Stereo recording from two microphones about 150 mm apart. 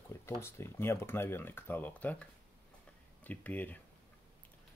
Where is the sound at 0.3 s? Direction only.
20° left (ahead or behind).